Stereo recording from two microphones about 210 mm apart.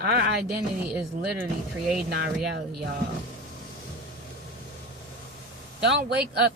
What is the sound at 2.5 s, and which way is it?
Speech, 50° right (ahead or behind).